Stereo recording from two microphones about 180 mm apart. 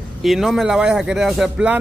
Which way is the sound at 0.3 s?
Centre (ahead or behind).